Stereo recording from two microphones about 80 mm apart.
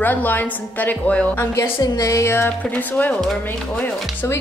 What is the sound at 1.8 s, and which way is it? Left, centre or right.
Speech, left.